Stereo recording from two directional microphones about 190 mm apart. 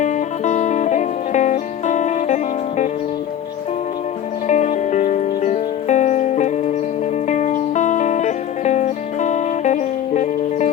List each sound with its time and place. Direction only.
0.0 s music: 40° left (ahead or behind)
4.4 s music: 40° left (ahead or behind)